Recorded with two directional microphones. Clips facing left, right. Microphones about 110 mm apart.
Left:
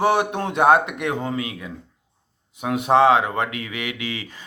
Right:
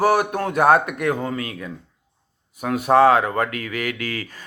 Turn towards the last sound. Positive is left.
turn(degrees=20)  # may be behind; listen again after turning